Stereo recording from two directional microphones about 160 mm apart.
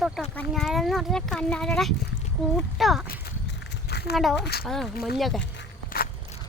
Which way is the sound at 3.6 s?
90° left.